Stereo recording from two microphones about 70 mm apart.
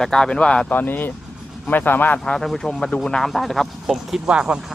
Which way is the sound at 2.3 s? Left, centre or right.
Centre.